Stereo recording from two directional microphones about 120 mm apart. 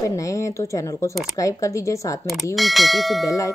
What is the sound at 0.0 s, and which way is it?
Speech, 25° left (ahead or behind).